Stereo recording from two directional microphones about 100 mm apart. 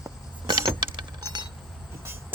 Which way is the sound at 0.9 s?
45° right (ahead or behind).